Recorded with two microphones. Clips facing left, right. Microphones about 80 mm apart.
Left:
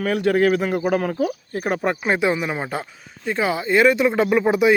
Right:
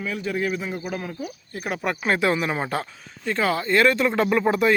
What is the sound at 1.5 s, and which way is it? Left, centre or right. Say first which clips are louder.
Speech: left 5 dB; left.